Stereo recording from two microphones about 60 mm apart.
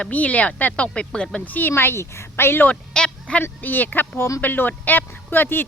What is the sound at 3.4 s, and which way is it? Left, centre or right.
A woman's voice, left.